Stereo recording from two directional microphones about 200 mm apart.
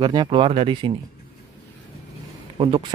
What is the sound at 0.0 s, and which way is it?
Speech, 20° right (ahead or behind).